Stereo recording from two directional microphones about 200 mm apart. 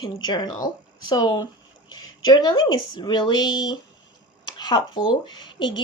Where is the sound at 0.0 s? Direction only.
20° left (ahead or behind).